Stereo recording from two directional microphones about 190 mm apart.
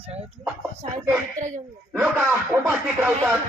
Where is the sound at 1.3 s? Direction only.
40° right (ahead or behind).